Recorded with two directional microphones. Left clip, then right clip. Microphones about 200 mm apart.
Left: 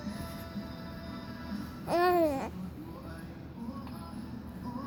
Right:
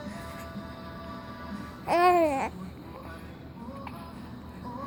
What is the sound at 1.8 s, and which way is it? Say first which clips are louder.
Babbling: right 5 dB; 15° right (ahead or behind).